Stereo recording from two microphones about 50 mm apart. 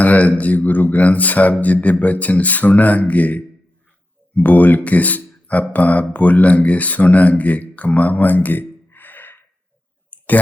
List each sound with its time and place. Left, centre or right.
0.0 s speech: left